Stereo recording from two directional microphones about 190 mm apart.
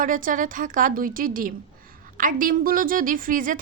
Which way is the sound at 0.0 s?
45° right (ahead or behind).